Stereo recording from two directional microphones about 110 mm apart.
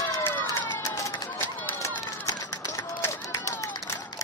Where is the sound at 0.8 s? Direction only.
30° left (ahead or behind).